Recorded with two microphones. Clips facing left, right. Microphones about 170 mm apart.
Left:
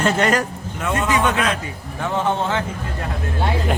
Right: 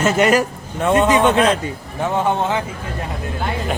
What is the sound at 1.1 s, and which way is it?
A man's voice, 25° right (ahead or behind).